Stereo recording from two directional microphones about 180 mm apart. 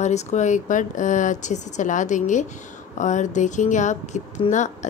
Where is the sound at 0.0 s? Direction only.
40° left (ahead or behind).